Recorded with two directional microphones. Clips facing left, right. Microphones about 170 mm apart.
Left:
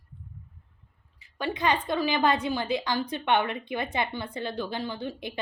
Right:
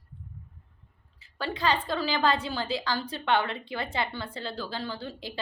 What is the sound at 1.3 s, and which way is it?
A woman's voice, 20° left (ahead or behind).